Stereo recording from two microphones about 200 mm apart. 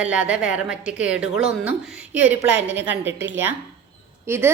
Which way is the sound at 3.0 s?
65° right (ahead or behind).